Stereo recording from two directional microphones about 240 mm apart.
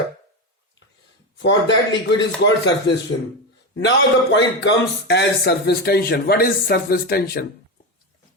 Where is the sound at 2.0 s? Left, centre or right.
Left.